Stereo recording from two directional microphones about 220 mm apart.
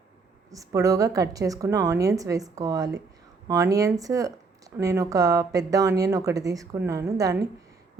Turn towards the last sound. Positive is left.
turn(degrees=-15)  # may be behind; listen again after turning